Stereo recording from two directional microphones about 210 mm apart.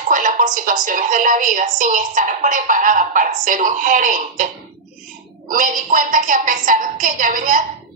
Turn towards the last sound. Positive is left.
turn(degrees=-40)  # may be behind; listen again after turning